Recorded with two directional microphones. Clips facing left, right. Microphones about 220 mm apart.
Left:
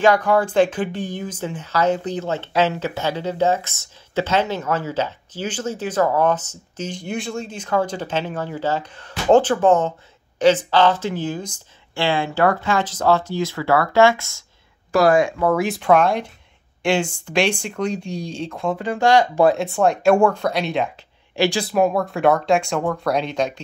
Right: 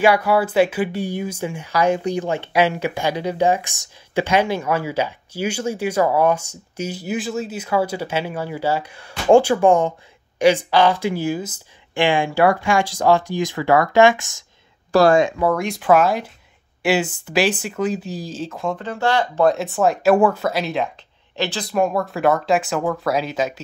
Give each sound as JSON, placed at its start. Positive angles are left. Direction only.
{"t": 0.0, "sound": "speech", "side_deg": -10}
{"t": 14.9, "sound": "speech", "side_deg": -30}
{"t": 15.4, "sound": "speech", "side_deg": 5}
{"t": 18.8, "sound": "speech", "side_deg": 15}
{"t": 19.5, "sound": "speech", "side_deg": 0}
{"t": 21.4, "sound": "speech", "side_deg": 10}